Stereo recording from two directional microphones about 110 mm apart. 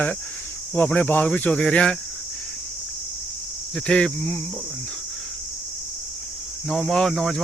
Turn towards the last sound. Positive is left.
turn(degrees=5)  # may be behind; listen again after turning